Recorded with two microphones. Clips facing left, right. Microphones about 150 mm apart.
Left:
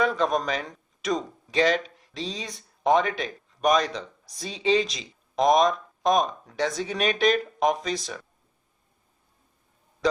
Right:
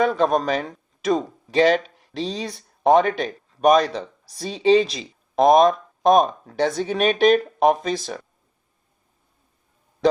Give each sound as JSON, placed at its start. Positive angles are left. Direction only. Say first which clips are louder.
{"t": 0.2, "sound": "speech", "louder": "right 5 dB", "side_deg": -55}